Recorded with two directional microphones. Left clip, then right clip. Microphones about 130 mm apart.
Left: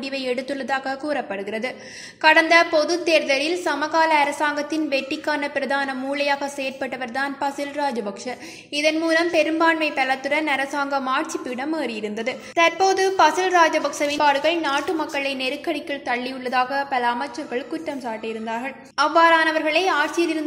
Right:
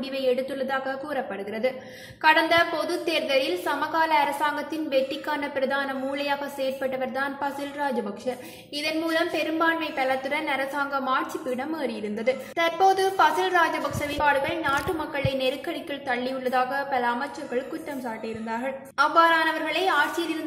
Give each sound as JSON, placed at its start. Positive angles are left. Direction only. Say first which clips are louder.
{"t": 0.2, "sound": "a woman's voice", "louder": "right 4 dB", "side_deg": 35}
{"t": 18.5, "sound": "a woman's voice", "louder": "left 2 dB", "side_deg": 40}